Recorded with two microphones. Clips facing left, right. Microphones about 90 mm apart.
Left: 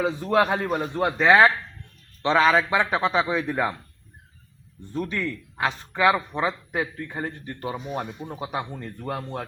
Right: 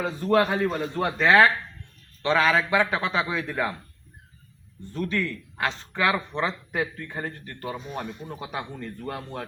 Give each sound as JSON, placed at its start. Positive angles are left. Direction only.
{"t": 0.0, "sound": "speech", "side_deg": 15}
{"t": 4.9, "sound": "speech", "side_deg": 15}